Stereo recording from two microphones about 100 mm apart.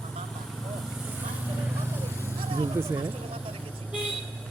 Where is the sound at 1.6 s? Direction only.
20° right (ahead or behind).